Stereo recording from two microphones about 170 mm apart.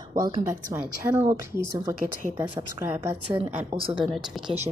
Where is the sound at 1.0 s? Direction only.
10° right (ahead or behind).